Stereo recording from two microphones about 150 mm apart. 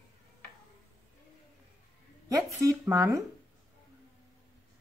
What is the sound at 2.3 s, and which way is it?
Speech, 20° right (ahead or behind).